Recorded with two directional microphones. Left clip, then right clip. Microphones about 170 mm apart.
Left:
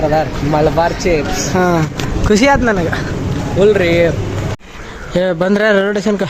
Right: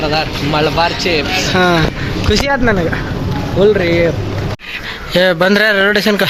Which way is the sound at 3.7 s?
35° left (ahead or behind).